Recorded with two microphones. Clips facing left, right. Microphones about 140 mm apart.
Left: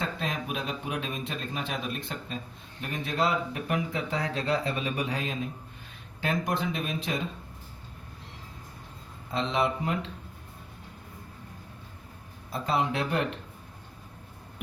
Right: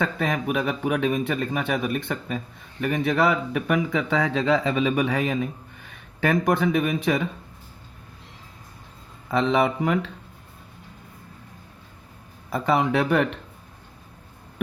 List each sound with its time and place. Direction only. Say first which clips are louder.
0.0 s speech: right 8 dB; 70° right (ahead or behind)
9.3 s speech: right 7 dB; 70° right (ahead or behind)
12.5 s speech: right 6 dB; 80° right